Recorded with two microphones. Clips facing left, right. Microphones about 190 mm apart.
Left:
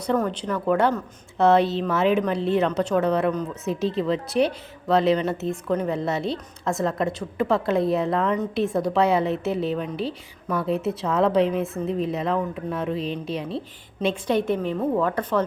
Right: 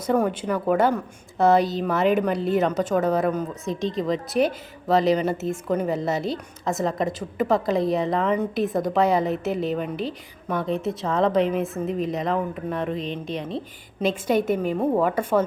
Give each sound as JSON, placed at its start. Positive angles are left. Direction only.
{"t": 0.1, "sound": "a woman's voice", "side_deg": -10}
{"t": 13.0, "sound": "a woman's voice", "side_deg": 35}
{"t": 13.3, "sound": "a woman's voice", "side_deg": 5}